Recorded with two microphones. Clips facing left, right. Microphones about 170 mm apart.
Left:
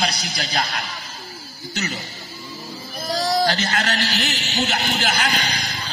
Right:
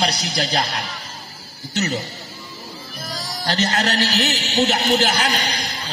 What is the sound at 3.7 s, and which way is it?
A man's voice, 35° right (ahead or behind).